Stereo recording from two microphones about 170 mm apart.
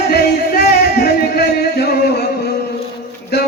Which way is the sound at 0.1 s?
70° left (ahead or behind).